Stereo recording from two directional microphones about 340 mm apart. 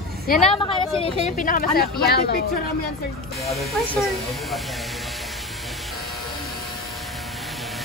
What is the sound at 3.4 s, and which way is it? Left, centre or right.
Speech, centre.